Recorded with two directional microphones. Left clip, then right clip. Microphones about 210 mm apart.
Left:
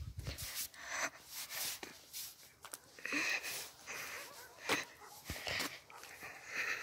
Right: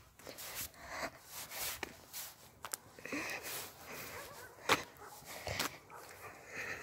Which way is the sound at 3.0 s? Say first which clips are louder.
Left 5 dB; centre (ahead or behind).